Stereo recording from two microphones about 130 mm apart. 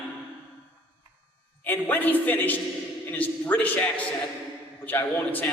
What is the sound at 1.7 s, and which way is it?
A man's voice, 15° left (ahead or behind).